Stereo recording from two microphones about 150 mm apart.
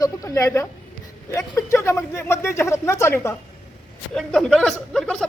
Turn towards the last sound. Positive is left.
turn(degrees=5)  # may be behind; listen again after turning